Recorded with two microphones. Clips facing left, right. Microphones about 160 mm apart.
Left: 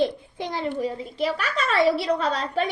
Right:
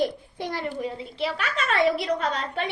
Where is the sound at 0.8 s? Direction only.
45° left (ahead or behind).